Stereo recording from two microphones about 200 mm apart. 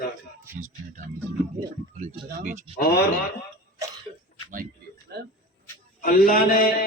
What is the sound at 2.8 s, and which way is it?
Speech, 50° left (ahead or behind).